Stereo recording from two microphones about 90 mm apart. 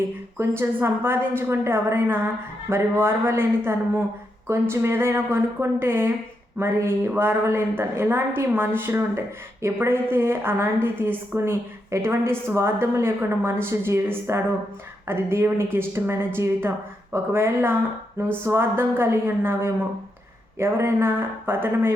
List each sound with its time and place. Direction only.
0.3 s a woman's voice: 25° right (ahead or behind)